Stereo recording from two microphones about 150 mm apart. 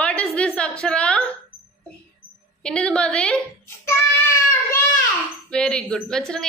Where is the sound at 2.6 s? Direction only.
5° left (ahead or behind).